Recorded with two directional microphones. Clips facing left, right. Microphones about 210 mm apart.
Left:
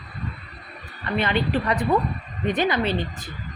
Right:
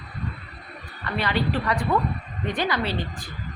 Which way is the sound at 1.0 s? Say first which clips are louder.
Left 2 dB; 20° left (ahead or behind).